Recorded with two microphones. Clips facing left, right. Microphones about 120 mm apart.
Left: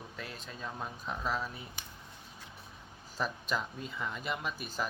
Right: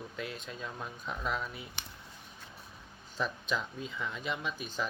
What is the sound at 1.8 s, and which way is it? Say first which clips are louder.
Speech: right 2 dB; 70° right (ahead or behind).